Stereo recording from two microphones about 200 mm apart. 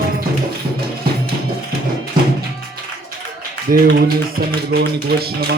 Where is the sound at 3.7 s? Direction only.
45° right (ahead or behind).